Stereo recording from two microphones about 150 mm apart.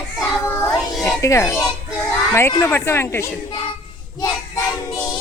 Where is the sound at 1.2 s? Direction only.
20° left (ahead or behind).